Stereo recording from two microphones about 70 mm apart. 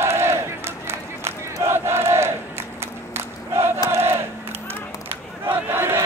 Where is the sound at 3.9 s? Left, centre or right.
Right.